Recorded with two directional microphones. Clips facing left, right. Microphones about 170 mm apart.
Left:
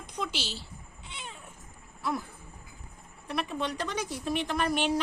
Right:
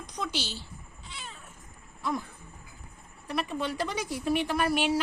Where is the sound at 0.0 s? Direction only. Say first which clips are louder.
Right 1 dB; 5° left (ahead or behind).